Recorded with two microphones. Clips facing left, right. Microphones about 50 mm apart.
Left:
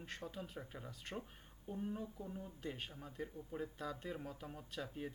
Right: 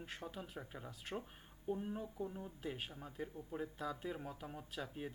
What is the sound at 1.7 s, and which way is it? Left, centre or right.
Speech, centre.